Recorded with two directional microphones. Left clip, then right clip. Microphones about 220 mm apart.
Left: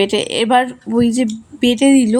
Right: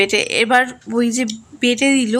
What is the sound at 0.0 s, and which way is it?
Speech, 15° left (ahead or behind).